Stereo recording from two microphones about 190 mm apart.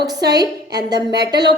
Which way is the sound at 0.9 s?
60° right (ahead or behind).